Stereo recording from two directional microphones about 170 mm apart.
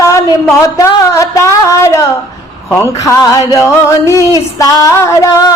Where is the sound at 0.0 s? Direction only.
20° left (ahead or behind).